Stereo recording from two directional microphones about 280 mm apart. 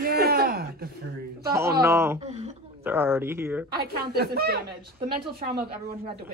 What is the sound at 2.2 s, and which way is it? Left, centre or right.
Speech, right.